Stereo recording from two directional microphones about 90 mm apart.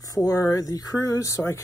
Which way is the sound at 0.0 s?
40° left (ahead or behind).